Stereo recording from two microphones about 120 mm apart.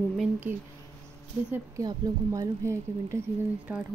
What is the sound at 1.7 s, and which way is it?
Speech, 30° right (ahead or behind).